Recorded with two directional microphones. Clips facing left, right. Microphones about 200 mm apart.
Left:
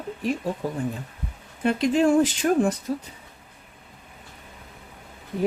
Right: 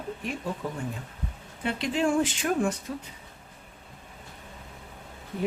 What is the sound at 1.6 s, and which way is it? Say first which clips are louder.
Speech: left 7 dB; 45° left (ahead or behind).